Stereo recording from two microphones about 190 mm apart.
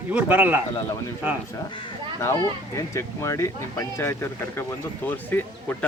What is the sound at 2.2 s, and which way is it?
Speech, 15° left (ahead or behind).